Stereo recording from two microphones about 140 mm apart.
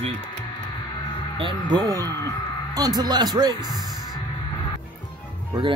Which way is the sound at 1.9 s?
25° right (ahead or behind).